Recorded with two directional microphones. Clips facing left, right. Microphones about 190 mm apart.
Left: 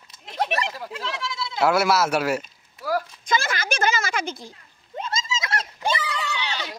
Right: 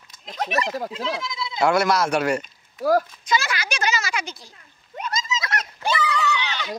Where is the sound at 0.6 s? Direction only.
45° right (ahead or behind).